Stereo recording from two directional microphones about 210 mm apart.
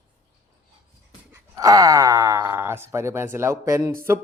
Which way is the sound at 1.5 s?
15° right (ahead or behind).